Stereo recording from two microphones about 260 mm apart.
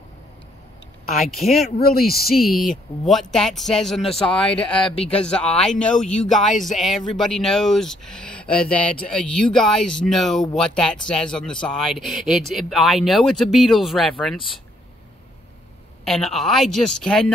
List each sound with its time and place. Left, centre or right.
1.2 s speech: centre
1.8 s speech: left
3.1 s speech: centre
4.8 s speech: left
5.1 s speech: centre
16.0 s speech: centre